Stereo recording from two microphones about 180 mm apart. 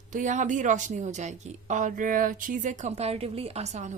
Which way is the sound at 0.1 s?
45° right (ahead or behind).